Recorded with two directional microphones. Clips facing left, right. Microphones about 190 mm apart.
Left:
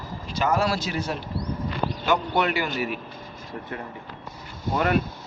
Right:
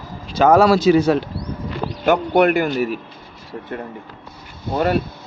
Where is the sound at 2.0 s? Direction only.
55° right (ahead or behind).